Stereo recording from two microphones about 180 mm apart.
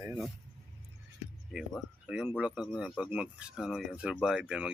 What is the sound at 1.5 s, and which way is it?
Speech, 5° right (ahead or behind).